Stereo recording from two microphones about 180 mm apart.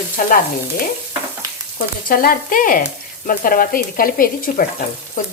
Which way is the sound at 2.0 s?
55° left (ahead or behind).